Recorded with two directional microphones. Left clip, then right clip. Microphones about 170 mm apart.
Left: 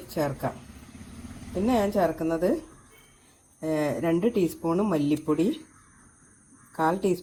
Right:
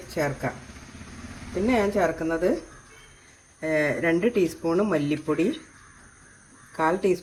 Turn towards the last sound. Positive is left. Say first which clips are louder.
# right 2 dB
turn(degrees=50)  # may be behind; listen again after turning